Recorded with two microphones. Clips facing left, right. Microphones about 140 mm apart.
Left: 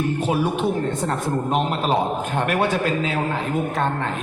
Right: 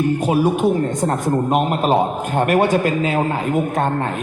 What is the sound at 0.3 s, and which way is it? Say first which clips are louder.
Speech: right 6 dB; 45° right (ahead or behind).